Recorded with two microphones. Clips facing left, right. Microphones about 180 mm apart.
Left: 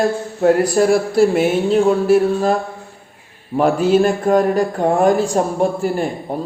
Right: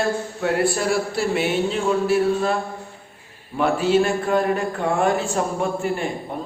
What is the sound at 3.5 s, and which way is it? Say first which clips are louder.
Speech: left 5 dB; 40° left (ahead or behind).